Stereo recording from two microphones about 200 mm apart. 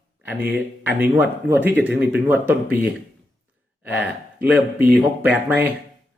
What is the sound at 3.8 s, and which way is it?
Speech, 5° right (ahead or behind).